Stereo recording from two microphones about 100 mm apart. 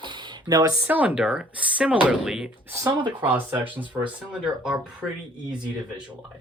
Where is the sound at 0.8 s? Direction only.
15° right (ahead or behind).